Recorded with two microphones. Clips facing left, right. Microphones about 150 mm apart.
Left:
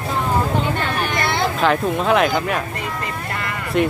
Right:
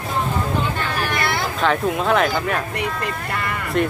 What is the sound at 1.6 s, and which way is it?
Speech, centre (ahead or behind).